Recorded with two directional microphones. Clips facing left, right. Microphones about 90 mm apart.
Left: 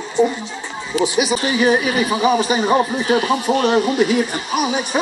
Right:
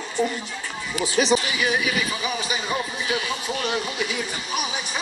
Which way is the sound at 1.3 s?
40° left (ahead or behind).